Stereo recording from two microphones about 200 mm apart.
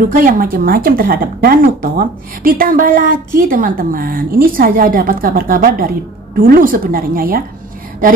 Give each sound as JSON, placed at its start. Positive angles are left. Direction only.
{"t": 0.1, "sound": "a woman's voice", "side_deg": -45}